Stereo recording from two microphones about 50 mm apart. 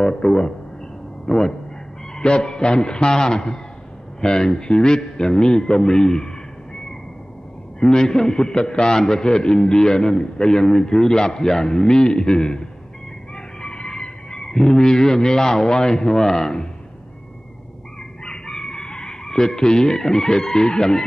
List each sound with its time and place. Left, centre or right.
0.0 s a man's voice: centre
7.8 s a man's voice: centre
18.2 s chicken: centre